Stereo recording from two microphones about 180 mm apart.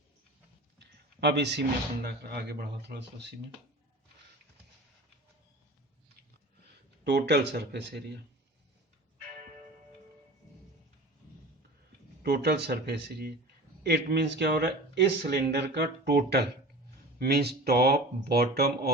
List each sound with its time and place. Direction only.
0.8 s a sound: 70° right (ahead or behind)
2.0 s speech: 65° right (ahead or behind)
7.0 s speech: 65° right (ahead or behind)
12.2 s speech: 60° right (ahead or behind)